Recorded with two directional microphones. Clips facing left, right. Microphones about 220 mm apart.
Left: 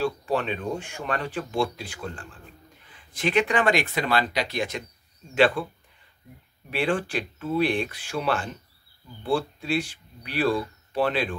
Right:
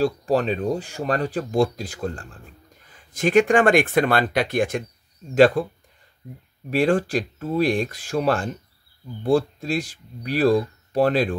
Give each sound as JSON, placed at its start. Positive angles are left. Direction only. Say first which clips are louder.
{"t": 0.0, "sound": "speech", "louder": "right 5 dB", "side_deg": -40}
{"t": 5.3, "sound": "speech", "louder": "right 6 dB", "side_deg": -40}
{"t": 6.7, "sound": "speech", "louder": "right 6 dB", "side_deg": -40}